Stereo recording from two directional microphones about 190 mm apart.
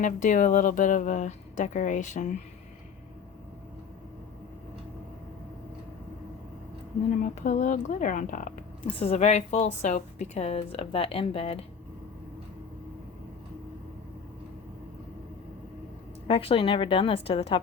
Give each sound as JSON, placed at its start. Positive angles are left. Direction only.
{"t": 0.0, "sound": "a woman's voice", "side_deg": 45}
{"t": 7.1, "sound": "a woman's voice", "side_deg": 40}
{"t": 16.2, "sound": "a woman's voice", "side_deg": 30}